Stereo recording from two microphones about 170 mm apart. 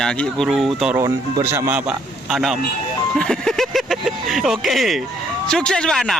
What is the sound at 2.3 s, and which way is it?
A man's voice, centre (ahead or behind).